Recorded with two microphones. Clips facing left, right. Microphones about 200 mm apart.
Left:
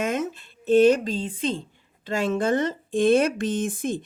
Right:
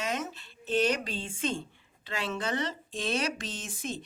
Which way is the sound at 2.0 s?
45° left (ahead or behind).